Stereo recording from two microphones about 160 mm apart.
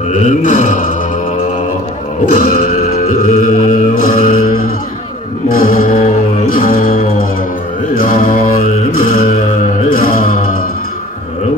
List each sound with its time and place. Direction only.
0.4 s a sound: 55° left (ahead or behind)
2.3 s music: 55° left (ahead or behind)
5.6 s music: 65° left (ahead or behind)
7.9 s mantra: 60° left (ahead or behind)
9.9 s music: 65° left (ahead or behind)